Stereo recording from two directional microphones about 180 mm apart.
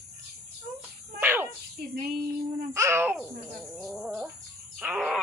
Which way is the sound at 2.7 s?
15° right (ahead or behind).